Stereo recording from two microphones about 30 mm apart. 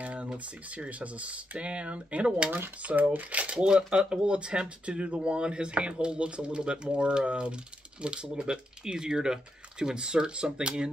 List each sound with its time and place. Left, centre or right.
0.0 s a sound: right
0.4 s speech: right
3.0 s speech: right
3.3 s speech: right
3.5 s speech: right